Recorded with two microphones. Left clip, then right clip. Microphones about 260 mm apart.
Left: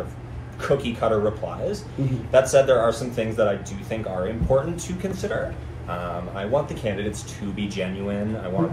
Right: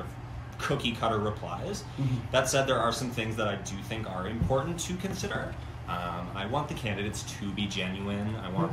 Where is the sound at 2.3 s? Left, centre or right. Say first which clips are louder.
Left 10 dB; centre.